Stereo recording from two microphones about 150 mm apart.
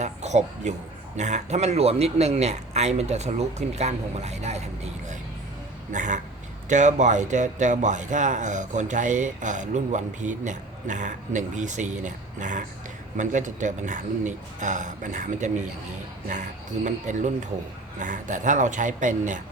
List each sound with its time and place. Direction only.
0.0 s speech: 50° right (ahead or behind)